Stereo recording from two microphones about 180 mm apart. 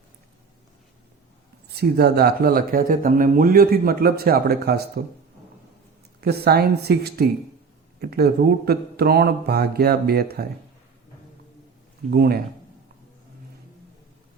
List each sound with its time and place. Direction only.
1.7 s speech: 65° right (ahead or behind)
6.1 s speech: 60° right (ahead or behind)
12.1 s speech: 60° right (ahead or behind)